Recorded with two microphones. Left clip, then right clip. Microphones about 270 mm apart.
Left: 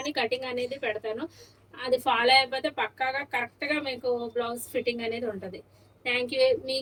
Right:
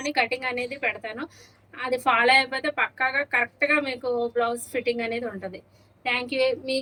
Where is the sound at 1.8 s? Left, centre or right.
Centre.